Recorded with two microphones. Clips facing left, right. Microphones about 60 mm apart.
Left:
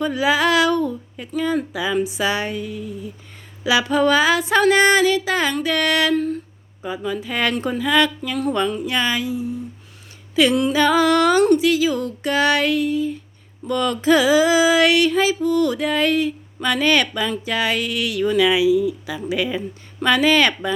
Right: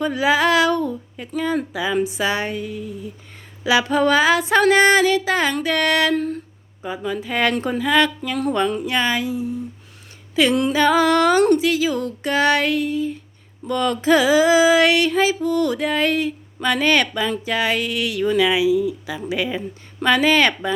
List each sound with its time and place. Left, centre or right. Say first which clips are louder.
0.0 s music: right 1 dB; right
6.8 s music: even; right
10.7 s music: even; right
19.3 s speech: left 1 dB; right